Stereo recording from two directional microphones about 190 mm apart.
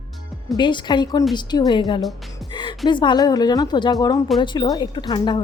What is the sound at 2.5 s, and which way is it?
Music, 25° left (ahead or behind).